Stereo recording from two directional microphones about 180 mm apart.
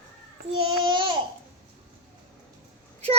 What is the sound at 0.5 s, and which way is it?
Babbling, 30° right (ahead or behind).